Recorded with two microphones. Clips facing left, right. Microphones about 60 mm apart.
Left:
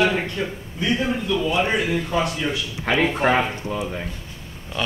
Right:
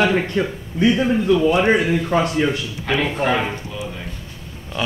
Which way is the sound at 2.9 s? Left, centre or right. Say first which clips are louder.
Left 1 dB; left.